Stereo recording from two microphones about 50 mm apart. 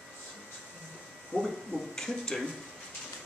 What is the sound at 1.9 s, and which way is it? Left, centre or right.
Speech, centre.